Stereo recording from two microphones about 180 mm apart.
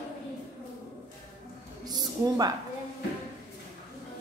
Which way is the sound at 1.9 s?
20° right (ahead or behind).